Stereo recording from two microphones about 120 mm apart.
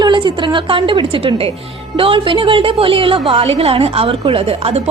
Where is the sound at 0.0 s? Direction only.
40° right (ahead or behind).